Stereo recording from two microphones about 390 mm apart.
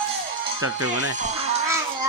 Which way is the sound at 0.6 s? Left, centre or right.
Right.